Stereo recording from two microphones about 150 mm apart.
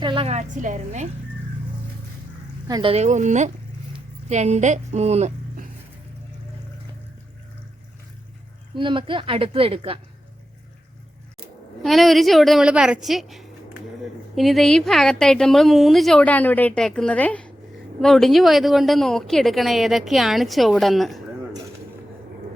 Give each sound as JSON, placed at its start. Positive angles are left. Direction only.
{"t": 0.0, "sound": "a woman's voice", "side_deg": -35}
{"t": 2.6, "sound": "speech", "side_deg": -25}
{"t": 2.9, "sound": "a woman's voice", "side_deg": -50}
{"t": 8.7, "sound": "a woman's voice", "side_deg": -30}
{"t": 11.8, "sound": "speech", "side_deg": 0}